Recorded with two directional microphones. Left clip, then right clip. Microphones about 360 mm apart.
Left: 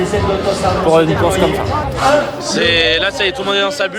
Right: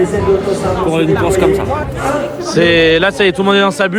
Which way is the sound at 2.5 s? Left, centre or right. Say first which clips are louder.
Right 3 dB; centre.